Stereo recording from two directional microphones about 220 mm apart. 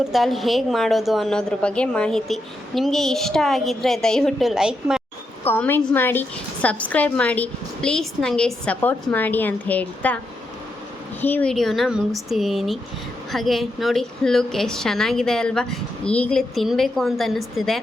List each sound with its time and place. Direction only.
0.1 s a woman's voice: centre (ahead or behind)
5.4 s a woman's voice: 10° left (ahead or behind)
11.2 s a woman's voice: 10° left (ahead or behind)